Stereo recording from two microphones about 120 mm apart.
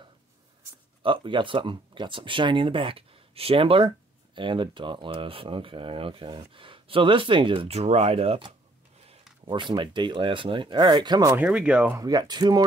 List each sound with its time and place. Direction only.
1.0 s speech: 45° right (ahead or behind)
9.5 s speech: 40° right (ahead or behind)
11.3 s speech: 10° right (ahead or behind)
12.0 s speech: 35° right (ahead or behind)